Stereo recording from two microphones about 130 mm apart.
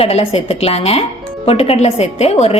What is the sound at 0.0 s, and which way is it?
A woman's voice, 45° left (ahead or behind).